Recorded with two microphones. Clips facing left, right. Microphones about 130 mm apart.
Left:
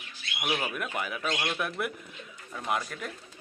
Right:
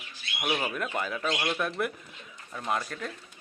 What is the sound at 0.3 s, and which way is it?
Speech, centre (ahead or behind).